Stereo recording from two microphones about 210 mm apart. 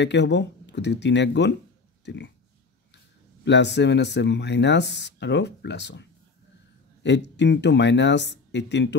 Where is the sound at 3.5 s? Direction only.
55° left (ahead or behind).